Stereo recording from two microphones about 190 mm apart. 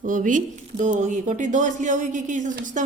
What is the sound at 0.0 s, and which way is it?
Speech, 45° right (ahead or behind).